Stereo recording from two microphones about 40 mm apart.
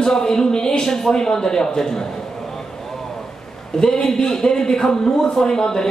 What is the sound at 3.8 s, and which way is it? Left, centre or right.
Speech, centre.